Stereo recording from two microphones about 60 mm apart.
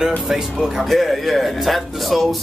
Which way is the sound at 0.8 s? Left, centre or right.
Centre.